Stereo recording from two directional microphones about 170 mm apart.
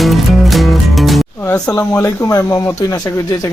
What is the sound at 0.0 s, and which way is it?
Music, centre (ahead or behind).